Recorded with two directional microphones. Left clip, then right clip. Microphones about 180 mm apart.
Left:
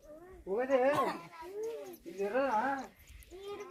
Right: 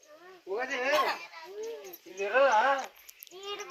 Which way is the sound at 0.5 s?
45° right (ahead or behind).